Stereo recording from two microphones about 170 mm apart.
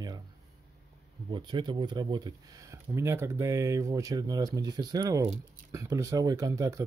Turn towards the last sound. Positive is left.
turn(degrees=-20)  # may be behind; listen again after turning